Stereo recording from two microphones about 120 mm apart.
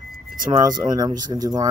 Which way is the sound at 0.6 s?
35° right (ahead or behind).